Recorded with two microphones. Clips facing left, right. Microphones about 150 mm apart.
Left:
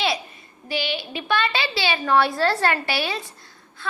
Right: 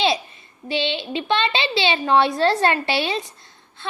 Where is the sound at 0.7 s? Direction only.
25° right (ahead or behind).